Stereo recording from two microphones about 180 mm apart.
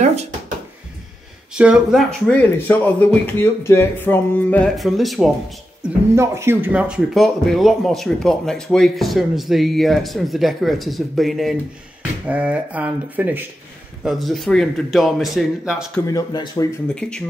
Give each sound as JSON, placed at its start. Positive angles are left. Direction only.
{"t": 0.0, "sound": "speech", "side_deg": -35}
{"t": 1.5, "sound": "speech", "side_deg": -5}
{"t": 5.8, "sound": "speech", "side_deg": -15}
{"t": 16.1, "sound": "speech", "side_deg": 20}
{"t": 17.0, "sound": "speech", "side_deg": 5}